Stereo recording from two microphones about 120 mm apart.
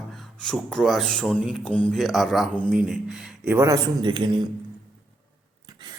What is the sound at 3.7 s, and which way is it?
Speech, 40° right (ahead or behind).